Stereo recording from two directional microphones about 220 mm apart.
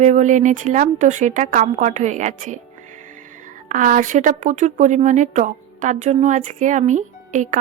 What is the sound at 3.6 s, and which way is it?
Speech, 35° right (ahead or behind).